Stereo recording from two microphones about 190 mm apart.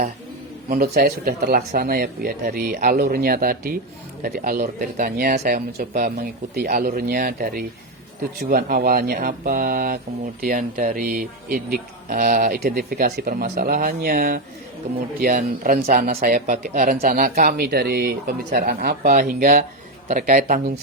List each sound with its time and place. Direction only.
0.7 s speech: 55° right (ahead or behind)